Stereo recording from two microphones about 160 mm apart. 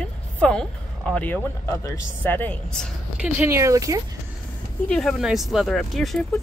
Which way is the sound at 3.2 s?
15° right (ahead or behind).